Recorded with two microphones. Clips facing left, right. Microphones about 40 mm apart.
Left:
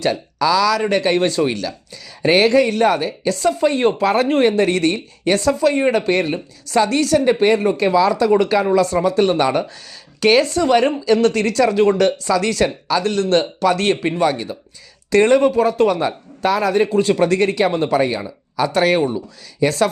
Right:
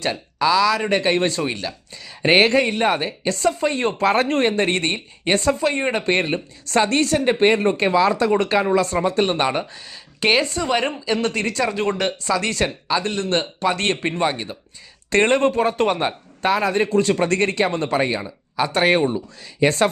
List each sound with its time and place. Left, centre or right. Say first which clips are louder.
0.0 s a woman's voice: left 3 dB; right
4.4 s a woman's voice: left 4 dB; right
12.6 s a woman's voice: left 4 dB; centre
15.1 s speech: left 4 dB; right
15.4 s speech: left 3 dB; right
15.9 s speech: left 2 dB; right
16.9 s speech: left 3 dB; right